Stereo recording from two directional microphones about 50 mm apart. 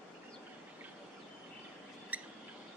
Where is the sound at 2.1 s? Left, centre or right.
Right.